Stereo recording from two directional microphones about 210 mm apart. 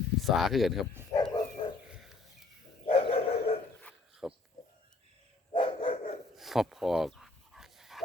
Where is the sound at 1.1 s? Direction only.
20° left (ahead or behind).